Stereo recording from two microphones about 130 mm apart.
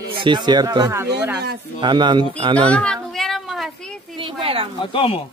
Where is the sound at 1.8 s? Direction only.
35° right (ahead or behind).